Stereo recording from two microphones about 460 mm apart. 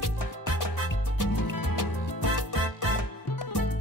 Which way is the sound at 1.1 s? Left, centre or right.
Left.